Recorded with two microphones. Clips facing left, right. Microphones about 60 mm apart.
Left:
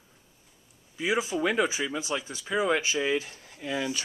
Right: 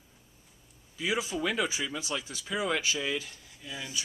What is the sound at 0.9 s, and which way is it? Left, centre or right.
Speech, left.